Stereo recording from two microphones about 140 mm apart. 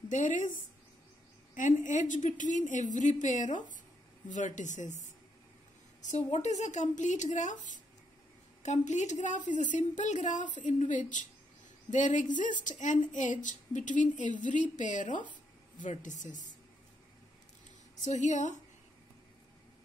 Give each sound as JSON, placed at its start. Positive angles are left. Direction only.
{"t": 0.1, "sound": "speech", "side_deg": 60}
{"t": 6.0, "sound": "speech", "side_deg": 55}
{"t": 18.0, "sound": "speech", "side_deg": 60}